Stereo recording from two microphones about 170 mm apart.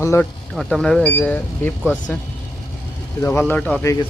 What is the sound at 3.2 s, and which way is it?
Speech, 10° left (ahead or behind).